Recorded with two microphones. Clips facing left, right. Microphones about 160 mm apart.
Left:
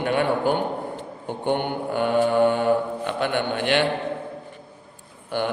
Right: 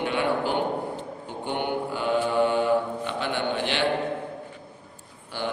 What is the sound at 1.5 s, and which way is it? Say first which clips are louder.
Mantra: left 4 dB; 55° left (ahead or behind).